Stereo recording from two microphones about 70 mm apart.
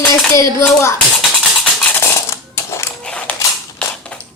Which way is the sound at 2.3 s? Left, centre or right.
Left.